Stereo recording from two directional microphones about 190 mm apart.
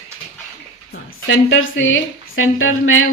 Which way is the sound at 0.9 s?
85° left.